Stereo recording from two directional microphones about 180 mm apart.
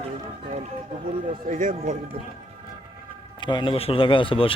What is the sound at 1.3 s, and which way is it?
Speech, 45° right (ahead or behind).